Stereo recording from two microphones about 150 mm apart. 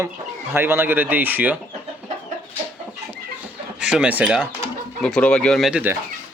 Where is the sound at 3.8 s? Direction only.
5° right (ahead or behind).